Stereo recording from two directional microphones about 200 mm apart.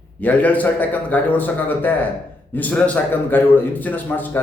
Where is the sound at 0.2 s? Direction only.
10° left (ahead or behind).